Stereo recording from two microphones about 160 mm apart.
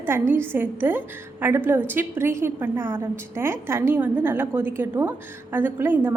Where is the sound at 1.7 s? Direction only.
10° right (ahead or behind).